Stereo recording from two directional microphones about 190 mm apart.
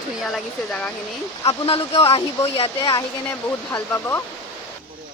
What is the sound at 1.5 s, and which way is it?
Speech, 30° left (ahead or behind).